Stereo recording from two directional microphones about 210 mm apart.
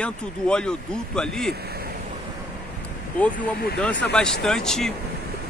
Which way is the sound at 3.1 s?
5° left (ahead or behind).